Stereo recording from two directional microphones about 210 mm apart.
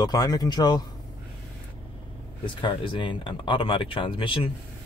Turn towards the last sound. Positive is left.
turn(degrees=25)  # may be behind; listen again after turning